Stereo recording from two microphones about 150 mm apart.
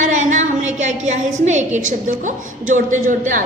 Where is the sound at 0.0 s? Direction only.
55° right (ahead or behind).